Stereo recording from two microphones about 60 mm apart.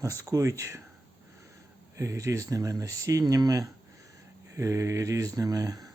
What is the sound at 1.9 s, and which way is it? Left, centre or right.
Speech, right.